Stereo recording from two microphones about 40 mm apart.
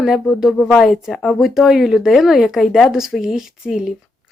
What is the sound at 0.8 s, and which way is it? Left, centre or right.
Speech, centre.